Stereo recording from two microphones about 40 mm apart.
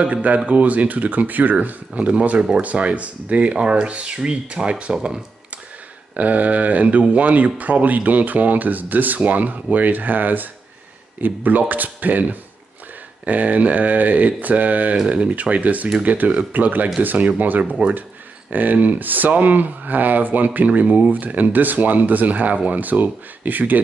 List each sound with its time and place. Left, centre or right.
0.0 s speech: right
3.5 s speech: right
6.1 s speech: right